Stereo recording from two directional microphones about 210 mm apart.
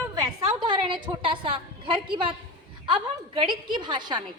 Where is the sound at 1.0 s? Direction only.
25° right (ahead or behind).